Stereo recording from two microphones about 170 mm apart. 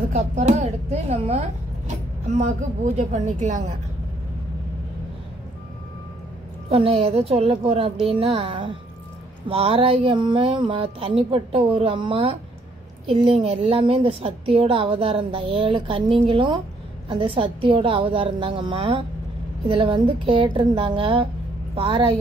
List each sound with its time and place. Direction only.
0.1 s a woman's voice: 45° right (ahead or behind)
6.7 s a woman's voice: 35° right (ahead or behind)